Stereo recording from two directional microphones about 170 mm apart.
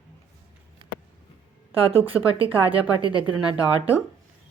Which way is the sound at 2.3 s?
35° right (ahead or behind).